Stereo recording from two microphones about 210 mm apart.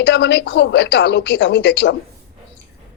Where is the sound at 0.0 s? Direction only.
55° left (ahead or behind).